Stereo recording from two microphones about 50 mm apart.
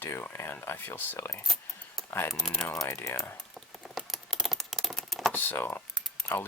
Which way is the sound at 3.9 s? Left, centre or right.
Centre.